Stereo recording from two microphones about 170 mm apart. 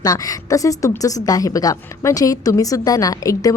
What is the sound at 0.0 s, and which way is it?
A woman's voice, 20° left (ahead or behind).